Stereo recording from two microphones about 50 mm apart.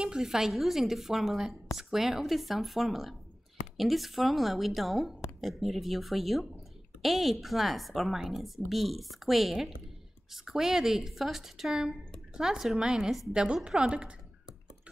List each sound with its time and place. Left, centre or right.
0.0 s a woman's voice: centre